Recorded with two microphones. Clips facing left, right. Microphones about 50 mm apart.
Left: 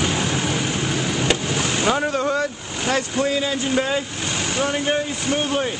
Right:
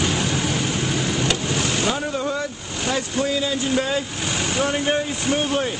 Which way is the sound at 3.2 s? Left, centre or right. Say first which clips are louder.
Left 1 dB; left.